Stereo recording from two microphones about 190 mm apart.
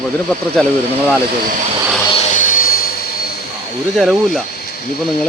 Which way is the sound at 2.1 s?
40° left (ahead or behind).